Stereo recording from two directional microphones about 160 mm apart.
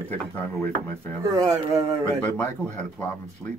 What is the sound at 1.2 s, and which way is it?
Speech, 25° right (ahead or behind).